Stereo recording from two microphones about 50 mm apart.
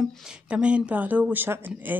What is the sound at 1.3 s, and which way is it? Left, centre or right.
Speech, right.